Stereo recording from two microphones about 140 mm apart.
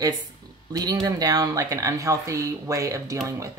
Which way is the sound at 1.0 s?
25° right (ahead or behind).